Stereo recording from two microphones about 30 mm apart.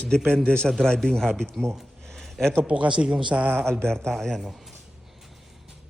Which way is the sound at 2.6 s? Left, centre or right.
Right.